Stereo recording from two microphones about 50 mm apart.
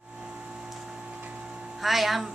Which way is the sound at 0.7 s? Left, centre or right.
Centre.